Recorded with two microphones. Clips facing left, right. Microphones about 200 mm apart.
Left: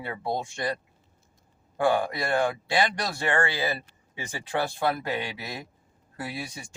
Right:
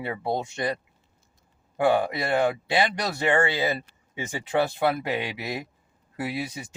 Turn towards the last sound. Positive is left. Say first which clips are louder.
# right 5 dB
turn(degrees=-20)  # may be behind; listen again after turning